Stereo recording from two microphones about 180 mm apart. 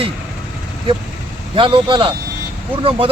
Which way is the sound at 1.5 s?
30° right (ahead or behind).